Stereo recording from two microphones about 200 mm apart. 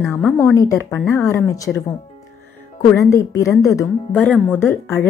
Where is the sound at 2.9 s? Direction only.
15° left (ahead or behind).